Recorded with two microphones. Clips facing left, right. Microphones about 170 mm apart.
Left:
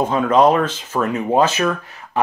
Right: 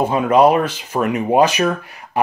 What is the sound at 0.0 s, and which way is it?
Speech, 10° right (ahead or behind).